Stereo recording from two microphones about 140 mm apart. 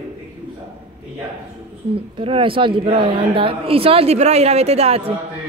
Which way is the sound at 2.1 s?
40° right (ahead or behind).